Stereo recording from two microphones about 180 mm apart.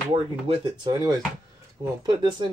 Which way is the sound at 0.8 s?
20° right (ahead or behind).